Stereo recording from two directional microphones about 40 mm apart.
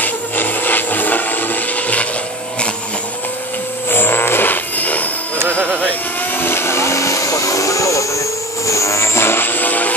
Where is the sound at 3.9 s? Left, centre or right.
Left.